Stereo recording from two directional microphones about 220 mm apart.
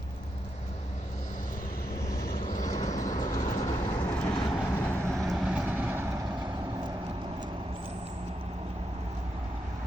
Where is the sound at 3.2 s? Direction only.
35° left (ahead or behind).